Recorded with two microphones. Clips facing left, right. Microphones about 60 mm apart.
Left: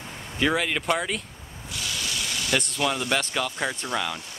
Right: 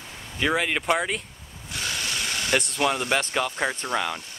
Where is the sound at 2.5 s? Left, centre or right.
Right.